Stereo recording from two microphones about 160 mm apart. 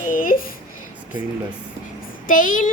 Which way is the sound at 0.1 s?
60° left (ahead or behind).